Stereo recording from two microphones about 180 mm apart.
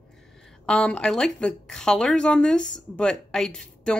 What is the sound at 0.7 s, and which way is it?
Speech, 5° left (ahead or behind).